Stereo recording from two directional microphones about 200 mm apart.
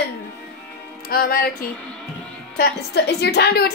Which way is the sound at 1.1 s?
45° left (ahead or behind).